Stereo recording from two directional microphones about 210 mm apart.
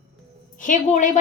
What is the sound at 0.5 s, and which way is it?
Speech, 40° left (ahead or behind).